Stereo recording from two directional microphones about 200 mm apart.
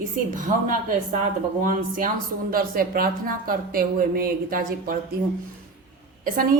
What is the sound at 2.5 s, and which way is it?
A woman's voice, 45° right (ahead or behind).